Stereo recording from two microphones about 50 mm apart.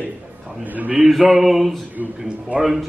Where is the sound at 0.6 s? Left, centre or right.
Right.